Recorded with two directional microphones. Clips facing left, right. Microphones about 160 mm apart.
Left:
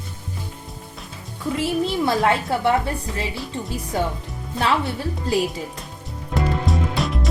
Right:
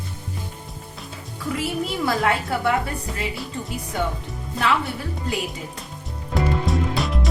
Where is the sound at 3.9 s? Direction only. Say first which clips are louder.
Left 2 dB; 35° left (ahead or behind).